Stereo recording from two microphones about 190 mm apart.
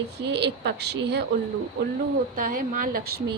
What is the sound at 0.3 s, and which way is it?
Speech, 60° right (ahead or behind).